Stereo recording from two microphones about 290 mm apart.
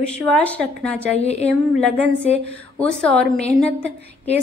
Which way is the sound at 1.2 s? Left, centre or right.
Left.